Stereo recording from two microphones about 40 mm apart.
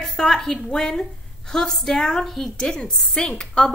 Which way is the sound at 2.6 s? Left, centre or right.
Centre.